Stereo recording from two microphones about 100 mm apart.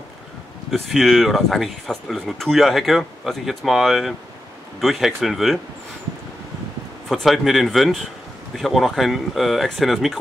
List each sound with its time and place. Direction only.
0.7 s speech: centre (ahead or behind)
7.1 s speech: centre (ahead or behind)